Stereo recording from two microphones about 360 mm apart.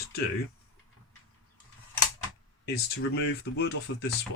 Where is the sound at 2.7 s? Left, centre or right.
Left.